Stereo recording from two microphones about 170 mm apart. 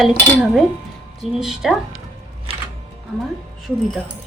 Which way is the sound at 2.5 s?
35° right (ahead or behind).